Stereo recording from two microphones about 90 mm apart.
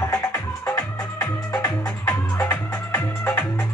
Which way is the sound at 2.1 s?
20° left (ahead or behind).